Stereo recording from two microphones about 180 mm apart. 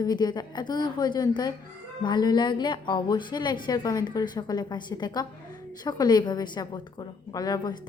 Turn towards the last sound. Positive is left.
turn(degrees=20)  # may be behind; listen again after turning